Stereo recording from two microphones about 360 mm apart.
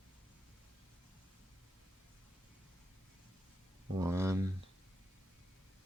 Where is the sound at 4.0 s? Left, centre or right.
Centre.